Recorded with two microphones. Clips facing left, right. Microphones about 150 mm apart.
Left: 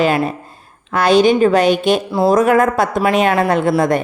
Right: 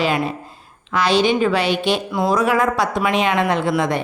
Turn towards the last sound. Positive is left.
turn(degrees=45)  # may be behind; listen again after turning